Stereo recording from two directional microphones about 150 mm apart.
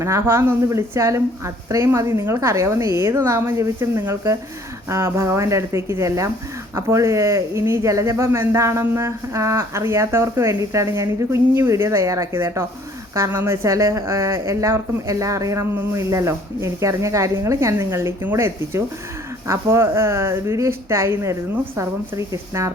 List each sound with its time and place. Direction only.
0.0 s speech: 20° right (ahead or behind)